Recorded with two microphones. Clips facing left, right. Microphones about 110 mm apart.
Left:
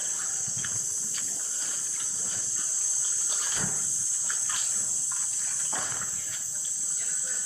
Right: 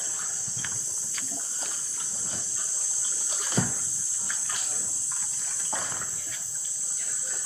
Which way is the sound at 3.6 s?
90° right.